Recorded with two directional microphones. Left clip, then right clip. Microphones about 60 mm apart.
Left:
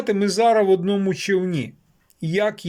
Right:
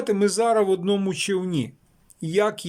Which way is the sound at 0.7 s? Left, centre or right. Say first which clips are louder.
Left 3 dB; right.